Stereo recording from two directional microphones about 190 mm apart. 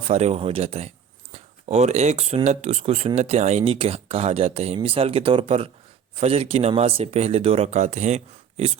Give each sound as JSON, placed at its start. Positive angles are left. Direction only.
{"t": 0.1, "sound": "speech", "side_deg": -35}